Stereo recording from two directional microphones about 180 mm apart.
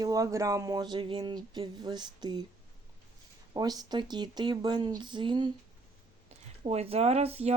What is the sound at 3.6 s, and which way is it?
Speech, 20° right (ahead or behind).